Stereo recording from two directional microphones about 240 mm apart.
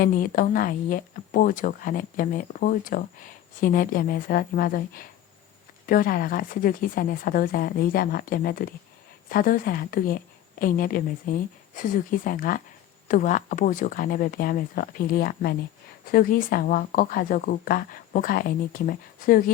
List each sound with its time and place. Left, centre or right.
0.0 s speech: left